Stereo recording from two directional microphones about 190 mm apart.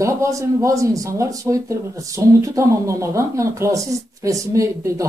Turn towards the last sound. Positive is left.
turn(degrees=-15)  # may be behind; listen again after turning